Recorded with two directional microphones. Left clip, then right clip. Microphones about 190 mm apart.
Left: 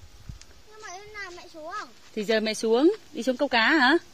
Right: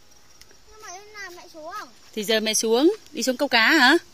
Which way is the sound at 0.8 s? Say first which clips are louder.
Even; 50° right (ahead or behind).